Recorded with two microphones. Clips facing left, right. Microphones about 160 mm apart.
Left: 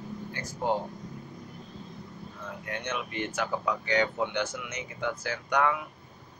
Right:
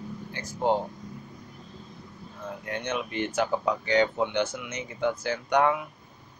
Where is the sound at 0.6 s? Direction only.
25° right (ahead or behind).